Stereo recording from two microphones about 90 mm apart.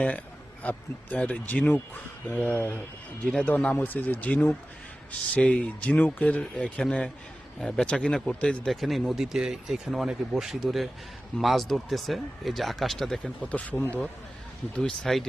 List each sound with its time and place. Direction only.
0.6 s speech: 15° left (ahead or behind)
8.7 s speech: centre (ahead or behind); by 13.8 s 15° left (ahead or behind)
14.8 s speech: 5° left (ahead or behind)